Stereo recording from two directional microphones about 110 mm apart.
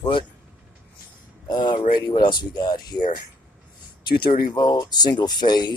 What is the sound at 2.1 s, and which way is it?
Speech, 45° left (ahead or behind).